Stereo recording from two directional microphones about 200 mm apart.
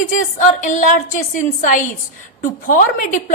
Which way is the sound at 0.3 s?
40° left (ahead or behind).